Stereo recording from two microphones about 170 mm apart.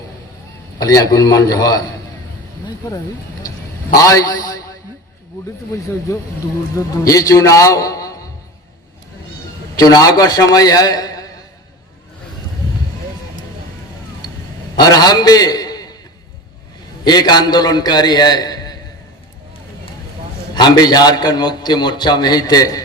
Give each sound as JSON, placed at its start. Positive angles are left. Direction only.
{"t": 0.8, "sound": "a man's voice", "side_deg": 20}
{"t": 3.9, "sound": "a man's voice", "side_deg": 20}
{"t": 6.7, "sound": "a man's voice", "side_deg": 20}
{"t": 9.7, "sound": "a man's voice", "side_deg": 20}
{"t": 14.8, "sound": "a man's voice", "side_deg": 25}
{"t": 17.0, "sound": "a man's voice", "side_deg": 25}
{"t": 20.6, "sound": "a man's voice", "side_deg": 25}